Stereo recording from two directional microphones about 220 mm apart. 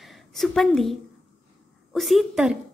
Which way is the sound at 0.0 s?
Centre (ahead or behind).